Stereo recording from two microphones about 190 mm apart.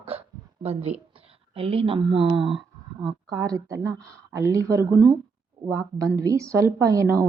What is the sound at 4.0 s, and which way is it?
Speech, 5° left (ahead or behind).